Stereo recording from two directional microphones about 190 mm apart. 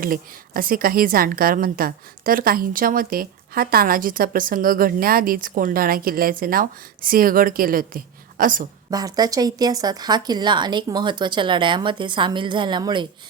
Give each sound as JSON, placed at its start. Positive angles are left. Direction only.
{"t": 0.0, "sound": "a woman's voice", "side_deg": -50}
{"t": 8.9, "sound": "speech", "side_deg": -20}